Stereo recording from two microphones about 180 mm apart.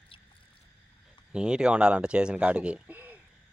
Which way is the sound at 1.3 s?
5° right (ahead or behind).